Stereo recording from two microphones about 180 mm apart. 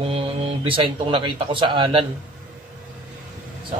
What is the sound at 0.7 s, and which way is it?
Mantra, 30° right (ahead or behind).